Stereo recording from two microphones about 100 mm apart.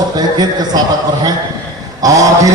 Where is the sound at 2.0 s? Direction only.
35° right (ahead or behind).